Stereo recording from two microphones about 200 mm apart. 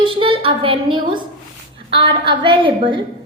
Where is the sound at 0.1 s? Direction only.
25° right (ahead or behind).